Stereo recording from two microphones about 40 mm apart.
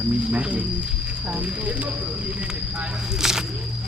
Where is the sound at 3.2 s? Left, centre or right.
Centre.